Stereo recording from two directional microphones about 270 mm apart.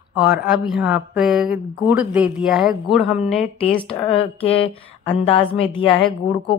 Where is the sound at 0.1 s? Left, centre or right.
Centre.